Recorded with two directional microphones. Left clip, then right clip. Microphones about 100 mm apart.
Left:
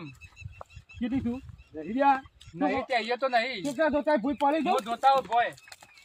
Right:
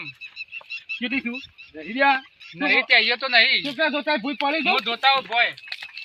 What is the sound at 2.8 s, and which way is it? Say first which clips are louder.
Speech: right 13 dB; 30° left (ahead or behind).